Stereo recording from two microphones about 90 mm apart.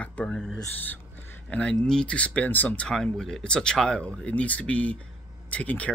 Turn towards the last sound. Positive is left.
turn(degrees=15)  # may be behind; listen again after turning